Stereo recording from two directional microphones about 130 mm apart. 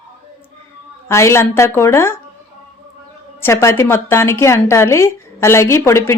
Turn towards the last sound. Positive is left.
turn(degrees=20)  # may be behind; listen again after turning